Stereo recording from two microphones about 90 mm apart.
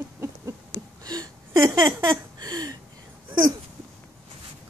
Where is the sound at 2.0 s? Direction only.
55° right (ahead or behind).